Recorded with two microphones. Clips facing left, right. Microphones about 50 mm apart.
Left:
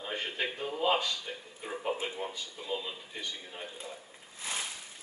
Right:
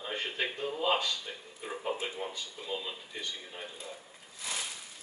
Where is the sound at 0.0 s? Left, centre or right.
Centre.